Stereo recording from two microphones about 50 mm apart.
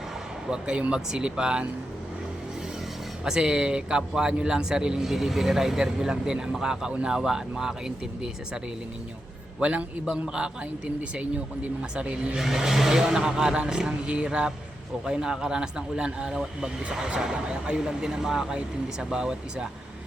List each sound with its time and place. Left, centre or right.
0.4 s speech: centre
3.2 s speech: centre
5.0 s speech: centre
9.6 s a man's voice: right
10.1 s speech: centre
11.1 s speech: right
12.4 s speech: centre